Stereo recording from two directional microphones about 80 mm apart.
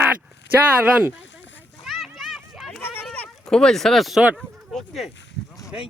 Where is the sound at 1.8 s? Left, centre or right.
Centre.